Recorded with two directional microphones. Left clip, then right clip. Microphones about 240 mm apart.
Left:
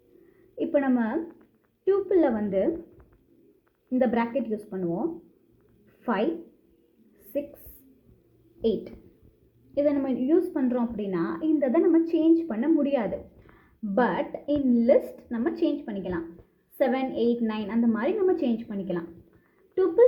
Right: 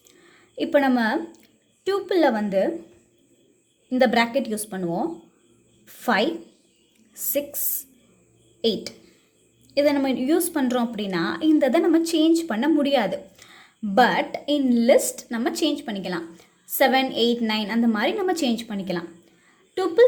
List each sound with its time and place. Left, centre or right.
0.5 s a woman's voice: right
3.8 s a woman's voice: centre
9.7 s a woman's voice: right